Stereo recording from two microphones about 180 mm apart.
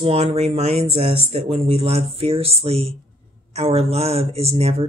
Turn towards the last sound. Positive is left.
turn(degrees=-35)  # may be behind; listen again after turning